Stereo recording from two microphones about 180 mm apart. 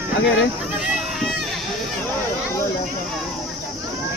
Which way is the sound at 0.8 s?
5° right (ahead or behind).